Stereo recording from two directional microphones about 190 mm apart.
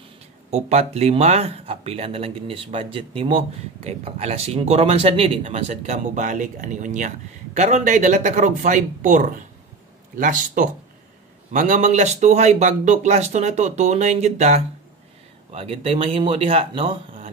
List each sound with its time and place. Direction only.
0.5 s speech: 35° right (ahead or behind)